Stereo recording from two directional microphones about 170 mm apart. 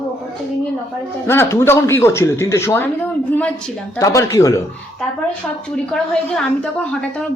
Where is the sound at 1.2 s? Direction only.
15° left (ahead or behind).